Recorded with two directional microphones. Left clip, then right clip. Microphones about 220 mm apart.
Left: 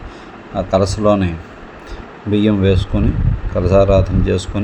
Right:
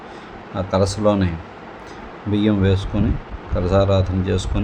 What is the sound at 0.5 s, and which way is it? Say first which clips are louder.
Speech: left 4 dB; 5° left (ahead or behind).